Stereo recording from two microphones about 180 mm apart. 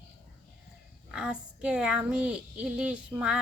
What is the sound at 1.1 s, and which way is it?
A woman's voice, 5° right (ahead or behind).